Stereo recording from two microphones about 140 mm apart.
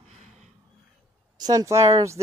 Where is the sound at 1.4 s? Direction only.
25° right (ahead or behind).